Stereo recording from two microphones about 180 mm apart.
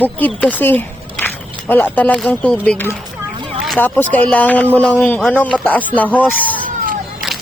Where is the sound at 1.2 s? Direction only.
10° left (ahead or behind).